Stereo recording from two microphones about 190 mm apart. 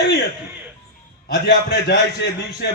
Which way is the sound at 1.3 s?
60° left (ahead or behind).